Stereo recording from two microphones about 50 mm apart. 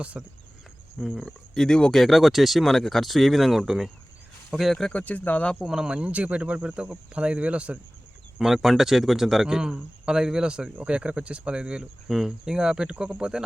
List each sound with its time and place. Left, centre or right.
0.1 s speech: right
0.9 s speech: centre
1.2 s speech: centre
4.9 s speech: left
5.6 s speech: centre
5.9 s speech: right
8.4 s speech: centre
12.0 s speech: centre